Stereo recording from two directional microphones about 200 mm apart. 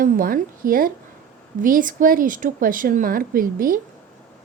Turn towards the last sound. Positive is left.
turn(degrees=-45)  # may be behind; listen again after turning